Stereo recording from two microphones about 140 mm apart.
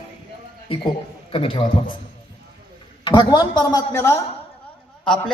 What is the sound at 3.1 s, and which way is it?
Speech, 30° left (ahead or behind).